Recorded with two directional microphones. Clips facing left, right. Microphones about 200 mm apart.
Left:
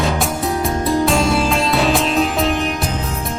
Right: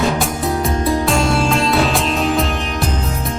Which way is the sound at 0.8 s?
Centre (ahead or behind).